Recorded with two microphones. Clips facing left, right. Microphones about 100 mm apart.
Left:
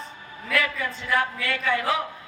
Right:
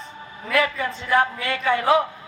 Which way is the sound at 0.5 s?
30° right (ahead or behind).